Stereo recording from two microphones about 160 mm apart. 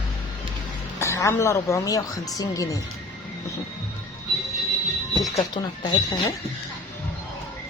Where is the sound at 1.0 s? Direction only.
15° left (ahead or behind).